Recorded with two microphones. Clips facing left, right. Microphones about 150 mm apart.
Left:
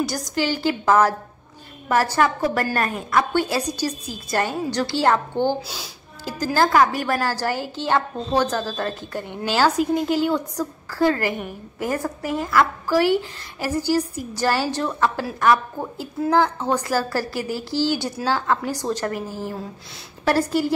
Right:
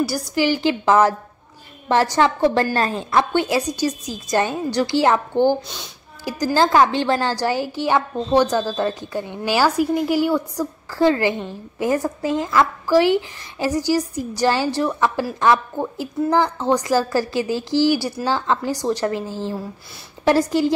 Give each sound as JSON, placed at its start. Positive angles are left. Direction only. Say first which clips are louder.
{"t": 0.0, "sound": "a woman's voice", "louder": "right 3 dB", "side_deg": -5}
{"t": 16.3, "sound": "a woman's voice", "louder": "right 1 dB", "side_deg": -15}
{"t": 19.2, "sound": "a woman's voice", "louder": "right 3 dB", "side_deg": 15}
{"t": 20.2, "sound": "a woman's voice", "louder": "right 3 dB", "side_deg": -15}